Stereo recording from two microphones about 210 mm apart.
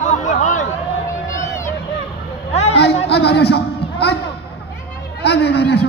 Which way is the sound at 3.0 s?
50° left (ahead or behind).